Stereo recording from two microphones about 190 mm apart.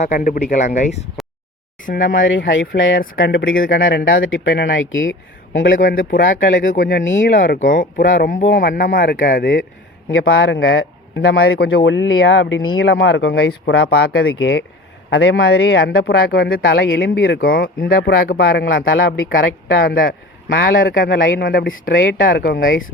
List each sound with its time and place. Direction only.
0.0 s speech: 35° left (ahead or behind)
1.2 s a sound: centre (ahead or behind)
1.8 s speech: 45° left (ahead or behind)
2.1 s speech: 80° left
5.7 s speech: 50° left (ahead or behind)
6.4 s speech: 70° left (ahead or behind)
6.7 s speech: 50° left (ahead or behind)
10.1 s speech: 90° left
19.7 s speech: 70° left (ahead or behind)
20.5 s speech: 80° left
20.8 s speech: 60° left (ahead or behind)